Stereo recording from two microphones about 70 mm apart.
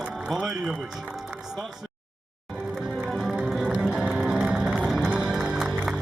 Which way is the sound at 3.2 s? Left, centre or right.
Centre.